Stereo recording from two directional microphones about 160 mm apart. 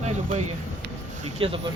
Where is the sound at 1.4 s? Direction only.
35° right (ahead or behind).